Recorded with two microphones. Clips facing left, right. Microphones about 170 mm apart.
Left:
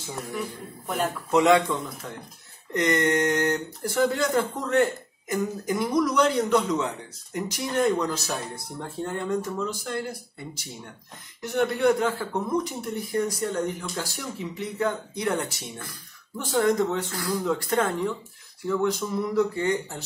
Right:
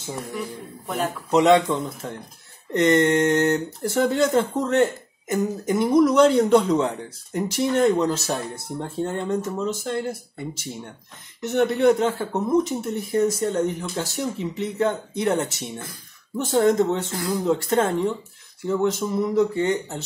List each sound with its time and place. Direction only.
0.8 s a man's voice: centre (ahead or behind)
1.3 s speech: 20° right (ahead or behind)